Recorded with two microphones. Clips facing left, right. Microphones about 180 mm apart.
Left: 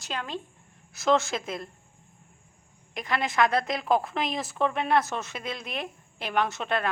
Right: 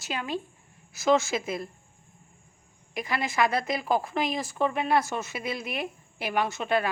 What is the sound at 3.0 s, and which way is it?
A woman's voice, 5° right (ahead or behind).